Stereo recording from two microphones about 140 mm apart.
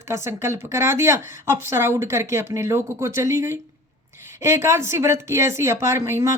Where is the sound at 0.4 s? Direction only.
20° right (ahead or behind).